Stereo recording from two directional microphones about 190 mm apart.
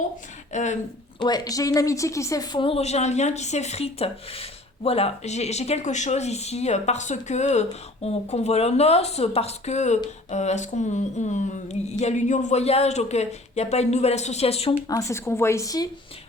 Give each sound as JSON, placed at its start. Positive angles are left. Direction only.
{"t": 0.5, "sound": "a woman's voice", "side_deg": 40}
{"t": 1.2, "sound": "a woman's voice", "side_deg": 20}
{"t": 14.8, "sound": "speech", "side_deg": 15}